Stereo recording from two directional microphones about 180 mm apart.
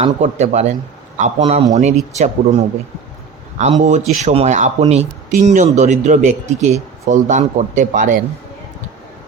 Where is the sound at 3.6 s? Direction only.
40° right (ahead or behind).